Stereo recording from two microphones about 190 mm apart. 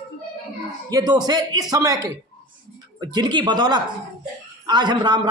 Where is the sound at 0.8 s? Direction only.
20° right (ahead or behind).